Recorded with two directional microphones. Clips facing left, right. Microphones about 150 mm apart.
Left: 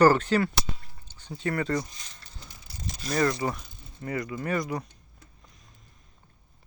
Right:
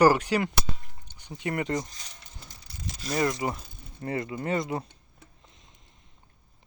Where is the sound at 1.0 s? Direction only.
15° right (ahead or behind).